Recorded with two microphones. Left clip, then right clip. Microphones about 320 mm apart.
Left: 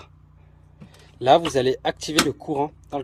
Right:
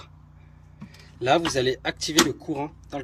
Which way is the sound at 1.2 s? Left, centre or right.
Left.